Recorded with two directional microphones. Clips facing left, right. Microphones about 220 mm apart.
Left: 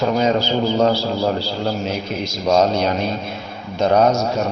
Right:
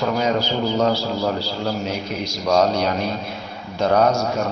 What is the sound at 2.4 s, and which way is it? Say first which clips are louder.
Speech: left 2 dB; 25° left (ahead or behind).